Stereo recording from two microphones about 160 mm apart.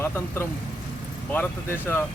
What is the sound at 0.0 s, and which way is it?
Speech, 15° left (ahead or behind).